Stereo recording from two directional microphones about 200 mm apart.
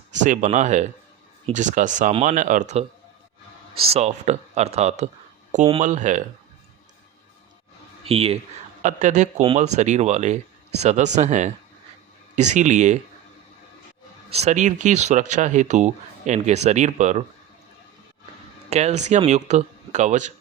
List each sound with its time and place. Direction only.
0.1 s speech: 35° right (ahead or behind)
8.0 s speech: 30° right (ahead or behind)
14.3 s speech: 35° right (ahead or behind)
18.7 s speech: 35° right (ahead or behind)